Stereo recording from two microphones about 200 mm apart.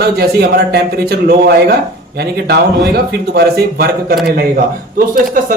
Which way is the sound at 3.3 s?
50° right (ahead or behind).